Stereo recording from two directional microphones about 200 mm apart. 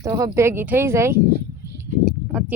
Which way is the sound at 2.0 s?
5° right (ahead or behind).